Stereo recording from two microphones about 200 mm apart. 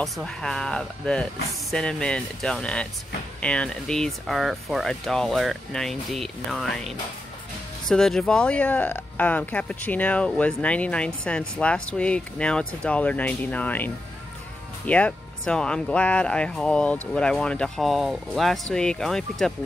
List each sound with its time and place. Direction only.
0.0 s speech: centre (ahead or behind)
7.9 s speech: 5° left (ahead or behind)